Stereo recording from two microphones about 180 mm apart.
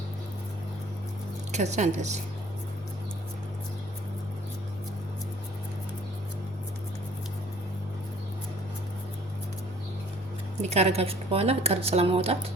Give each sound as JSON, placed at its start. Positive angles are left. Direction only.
{"t": 1.5, "sound": "speech", "side_deg": -40}
{"t": 10.6, "sound": "speech", "side_deg": -35}